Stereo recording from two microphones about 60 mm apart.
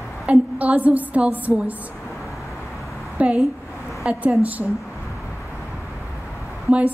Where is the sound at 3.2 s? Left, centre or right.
Right.